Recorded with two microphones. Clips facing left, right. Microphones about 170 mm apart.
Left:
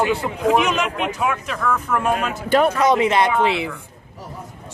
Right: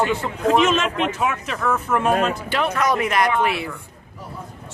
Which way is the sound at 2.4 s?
45° left (ahead or behind).